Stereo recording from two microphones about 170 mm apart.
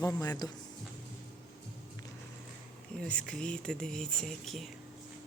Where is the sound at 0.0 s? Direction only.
20° left (ahead or behind).